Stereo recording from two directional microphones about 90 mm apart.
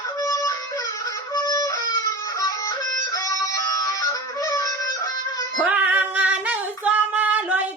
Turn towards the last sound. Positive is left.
turn(degrees=-15)  # may be behind; listen again after turning